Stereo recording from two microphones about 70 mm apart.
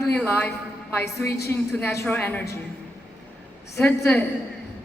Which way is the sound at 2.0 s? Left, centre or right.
Left.